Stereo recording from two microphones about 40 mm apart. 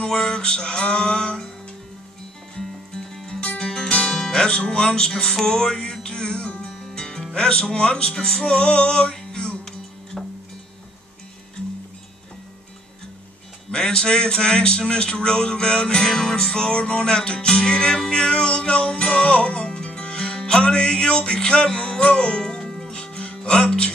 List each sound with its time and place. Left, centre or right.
0.0 s music: centre
2.5 s music: centre
7.3 s speech: centre
8.1 s music: centre
10.1 s music: centre
13.7 s speech: centre
22.4 s music: centre
22.8 s music: left